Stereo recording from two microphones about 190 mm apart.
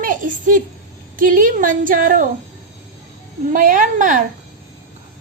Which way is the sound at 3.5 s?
45° right (ahead or behind).